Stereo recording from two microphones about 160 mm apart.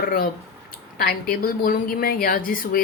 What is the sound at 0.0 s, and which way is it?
A woman's voice, 60° left (ahead or behind).